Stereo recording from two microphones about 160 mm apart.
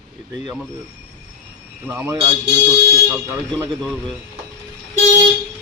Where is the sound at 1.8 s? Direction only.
15° right (ahead or behind).